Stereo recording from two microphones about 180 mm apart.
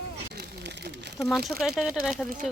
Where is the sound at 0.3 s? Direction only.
70° right (ahead or behind).